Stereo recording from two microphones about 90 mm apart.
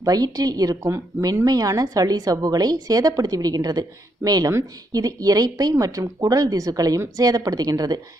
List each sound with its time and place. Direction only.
0.0 s a woman's voice: 45° right (ahead or behind)